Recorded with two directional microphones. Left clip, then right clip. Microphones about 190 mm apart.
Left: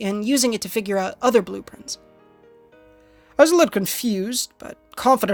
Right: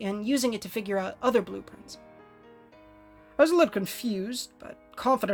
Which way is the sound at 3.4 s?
40° left (ahead or behind).